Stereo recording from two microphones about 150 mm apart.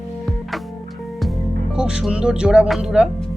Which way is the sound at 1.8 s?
5° right (ahead or behind).